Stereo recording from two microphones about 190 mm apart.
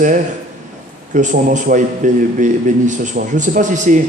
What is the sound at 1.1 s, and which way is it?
A man's voice, 40° right (ahead or behind).